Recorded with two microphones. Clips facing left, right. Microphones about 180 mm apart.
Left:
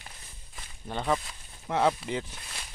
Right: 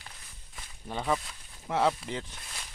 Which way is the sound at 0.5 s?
Centre (ahead or behind).